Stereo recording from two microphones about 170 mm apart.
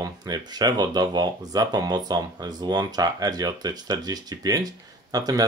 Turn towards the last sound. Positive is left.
turn(degrees=-20)  # may be behind; listen again after turning